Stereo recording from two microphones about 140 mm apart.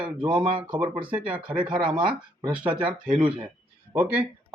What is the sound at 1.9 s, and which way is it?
Speech, 35° right (ahead or behind).